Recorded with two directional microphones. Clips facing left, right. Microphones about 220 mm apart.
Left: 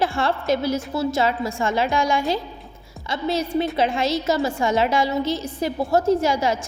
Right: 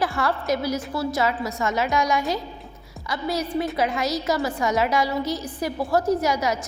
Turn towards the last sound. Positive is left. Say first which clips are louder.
# left 3 dB
turn(degrees=25)  # may be behind; listen again after turning